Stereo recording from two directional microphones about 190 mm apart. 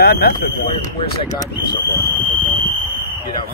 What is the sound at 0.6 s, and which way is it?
Speech, 30° left (ahead or behind).